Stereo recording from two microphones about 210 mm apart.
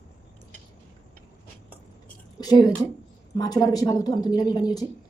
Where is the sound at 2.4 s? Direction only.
20° left (ahead or behind).